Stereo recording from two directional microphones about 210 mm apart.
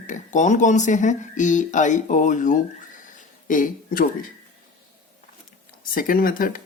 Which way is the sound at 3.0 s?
40° left (ahead or behind).